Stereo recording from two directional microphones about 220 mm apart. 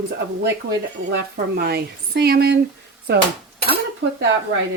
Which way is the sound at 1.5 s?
45° right (ahead or behind).